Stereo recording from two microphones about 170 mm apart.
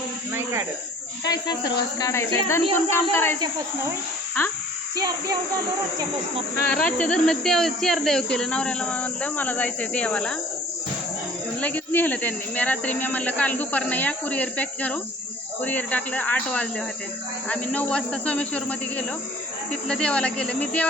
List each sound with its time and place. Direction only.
1.2 s speech: 25° left (ahead or behind)
4.9 s speech: 20° right (ahead or behind)
6.7 s speech: 10° left (ahead or behind)
11.6 s speech: 10° left (ahead or behind)